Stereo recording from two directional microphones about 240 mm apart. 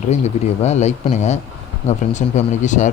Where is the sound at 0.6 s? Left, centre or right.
Left.